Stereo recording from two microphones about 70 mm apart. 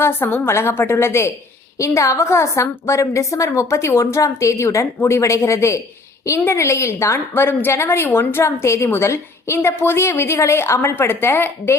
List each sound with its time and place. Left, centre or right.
0.0 s a woman's voice: left